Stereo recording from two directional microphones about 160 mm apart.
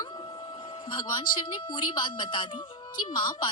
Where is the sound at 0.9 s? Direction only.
30° left (ahead or behind).